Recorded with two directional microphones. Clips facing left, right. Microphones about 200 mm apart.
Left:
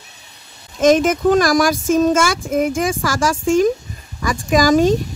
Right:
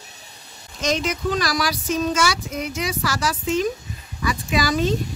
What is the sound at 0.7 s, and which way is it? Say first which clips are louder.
Speech: left 11 dB; 50° left (ahead or behind).